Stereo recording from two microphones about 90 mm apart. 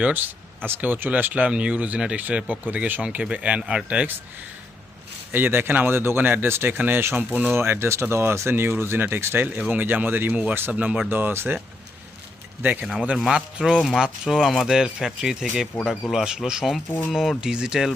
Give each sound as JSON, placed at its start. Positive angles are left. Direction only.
{"t": 0.0, "sound": "speech", "side_deg": -20}
{"t": 5.3, "sound": "speech", "side_deg": -25}
{"t": 13.1, "sound": "speech", "side_deg": -5}